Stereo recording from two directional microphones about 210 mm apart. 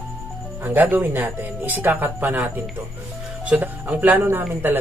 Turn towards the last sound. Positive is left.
turn(degrees=-10)  # may be behind; listen again after turning